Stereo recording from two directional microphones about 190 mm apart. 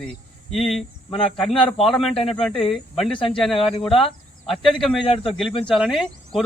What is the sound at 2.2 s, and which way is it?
Speech, 30° left (ahead or behind).